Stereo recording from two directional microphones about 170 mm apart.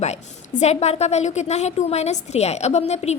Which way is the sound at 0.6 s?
40° left (ahead or behind).